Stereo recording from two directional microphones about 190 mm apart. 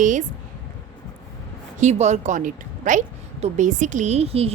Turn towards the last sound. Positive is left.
turn(degrees=-30)  # may be behind; listen again after turning